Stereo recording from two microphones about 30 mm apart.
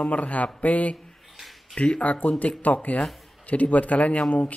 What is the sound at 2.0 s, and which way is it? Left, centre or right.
Speech, left.